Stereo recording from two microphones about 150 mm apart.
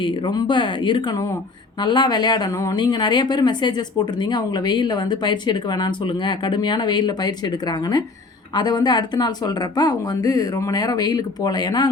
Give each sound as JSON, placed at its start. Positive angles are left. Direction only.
{"t": 0.0, "sound": "a woman's voice", "side_deg": 30}